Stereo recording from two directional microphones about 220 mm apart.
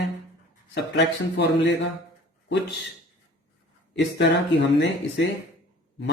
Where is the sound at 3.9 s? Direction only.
55° left (ahead or behind).